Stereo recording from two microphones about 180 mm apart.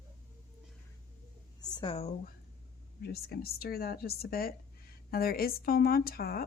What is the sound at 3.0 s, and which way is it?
Speech, 60° left (ahead or behind).